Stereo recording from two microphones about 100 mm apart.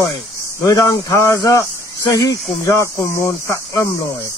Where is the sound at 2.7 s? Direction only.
30° left (ahead or behind).